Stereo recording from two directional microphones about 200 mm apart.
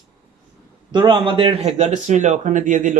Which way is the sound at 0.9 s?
25° right (ahead or behind).